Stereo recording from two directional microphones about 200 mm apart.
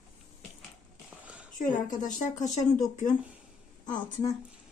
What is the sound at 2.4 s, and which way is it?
Speech, 40° left (ahead or behind).